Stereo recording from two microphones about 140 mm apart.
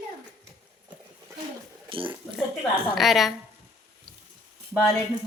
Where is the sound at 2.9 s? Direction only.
Centre (ahead or behind).